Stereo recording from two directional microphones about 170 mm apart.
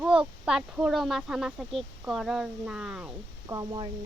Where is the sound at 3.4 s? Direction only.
20° right (ahead or behind).